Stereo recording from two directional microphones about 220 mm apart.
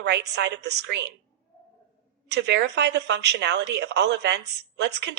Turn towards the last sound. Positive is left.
turn(degrees=-50)  # may be behind; listen again after turning